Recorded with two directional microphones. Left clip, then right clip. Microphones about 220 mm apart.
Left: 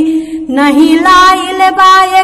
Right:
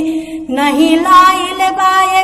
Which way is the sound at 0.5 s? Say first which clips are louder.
Left 4 dB; 20° left (ahead or behind).